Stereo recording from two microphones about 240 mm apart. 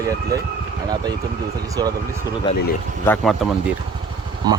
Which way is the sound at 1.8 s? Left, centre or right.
Centre.